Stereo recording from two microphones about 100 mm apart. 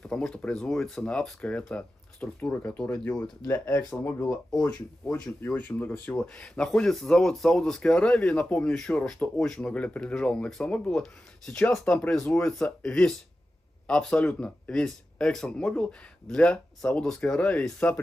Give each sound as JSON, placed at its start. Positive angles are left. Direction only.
{"t": 0.0, "sound": "speech", "side_deg": 10}
{"t": 3.6, "sound": "speech", "side_deg": 25}
{"t": 4.6, "sound": "speech", "side_deg": 10}
{"t": 5.2, "sound": "speech", "side_deg": 20}